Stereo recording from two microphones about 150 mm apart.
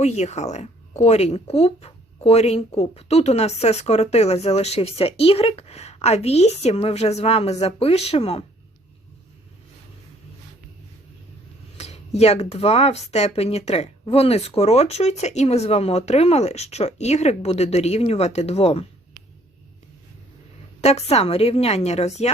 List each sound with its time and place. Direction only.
0.0 s speech: 50° left (ahead or behind)
11.8 s speech: 45° left (ahead or behind)
20.8 s speech: 45° left (ahead or behind)